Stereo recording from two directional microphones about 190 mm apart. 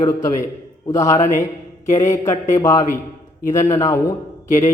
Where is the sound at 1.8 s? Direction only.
40° left (ahead or behind).